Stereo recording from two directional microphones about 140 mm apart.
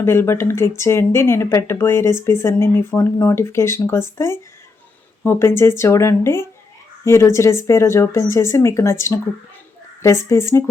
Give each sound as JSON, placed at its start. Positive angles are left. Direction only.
{"t": 0.0, "sound": "speech", "side_deg": 20}